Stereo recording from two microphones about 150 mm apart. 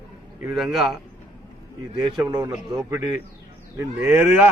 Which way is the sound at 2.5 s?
25° right (ahead or behind).